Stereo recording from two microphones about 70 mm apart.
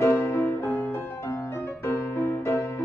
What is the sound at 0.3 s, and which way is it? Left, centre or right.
Music, left.